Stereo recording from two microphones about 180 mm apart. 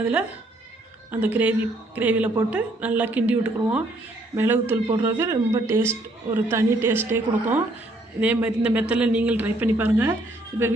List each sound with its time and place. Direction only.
1.1 s speech: 10° right (ahead or behind)